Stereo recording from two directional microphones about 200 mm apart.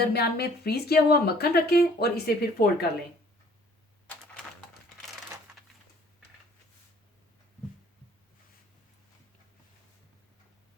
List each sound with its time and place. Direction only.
0.0 s speech: 50° left (ahead or behind)